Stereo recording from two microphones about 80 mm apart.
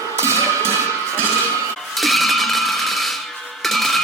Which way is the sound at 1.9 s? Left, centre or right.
Centre.